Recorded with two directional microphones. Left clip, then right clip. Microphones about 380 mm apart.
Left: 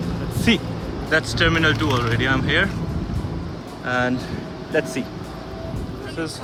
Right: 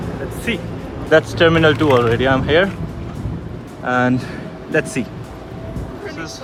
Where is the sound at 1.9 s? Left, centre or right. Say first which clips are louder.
Right 9 dB; right.